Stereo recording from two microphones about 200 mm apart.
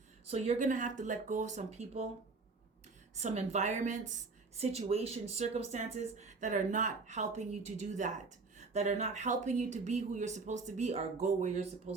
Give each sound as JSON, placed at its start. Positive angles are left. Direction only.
{"t": 0.3, "sound": "speech", "side_deg": -30}
{"t": 3.2, "sound": "speech", "side_deg": -35}